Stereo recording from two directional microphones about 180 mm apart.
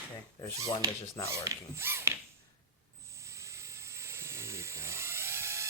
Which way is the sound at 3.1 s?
15° right (ahead or behind).